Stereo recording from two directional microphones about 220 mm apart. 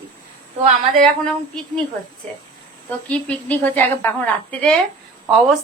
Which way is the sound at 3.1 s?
5° left (ahead or behind).